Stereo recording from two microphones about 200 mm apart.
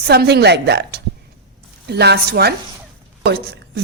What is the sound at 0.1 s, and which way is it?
A woman's voice, 55° right (ahead or behind).